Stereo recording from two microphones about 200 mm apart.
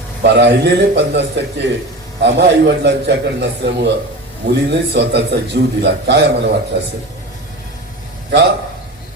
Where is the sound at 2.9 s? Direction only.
60° right (ahead or behind).